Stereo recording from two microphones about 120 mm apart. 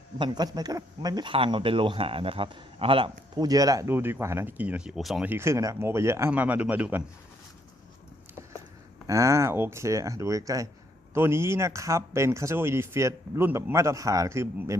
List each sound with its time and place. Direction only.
0.2 s speech: 35° right (ahead or behind); by 3.1 s 50° right (ahead or behind)
3.3 s speech: 30° right (ahead or behind)
3.8 s speech: 20° right (ahead or behind); by 5.2 s centre (ahead or behind)
5.2 s speech: 20° right (ahead or behind)
9.0 s speech: 25° right (ahead or behind)